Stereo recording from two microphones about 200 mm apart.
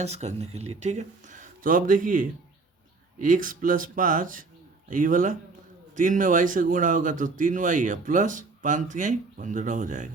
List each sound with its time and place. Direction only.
0.0 s a man's voice: 35° right (ahead or behind)